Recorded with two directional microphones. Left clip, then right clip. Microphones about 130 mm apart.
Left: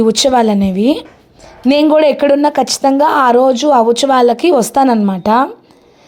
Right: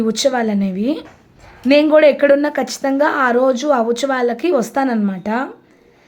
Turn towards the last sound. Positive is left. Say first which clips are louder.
# left 9 dB
turn(degrees=35)  # may be behind; listen again after turning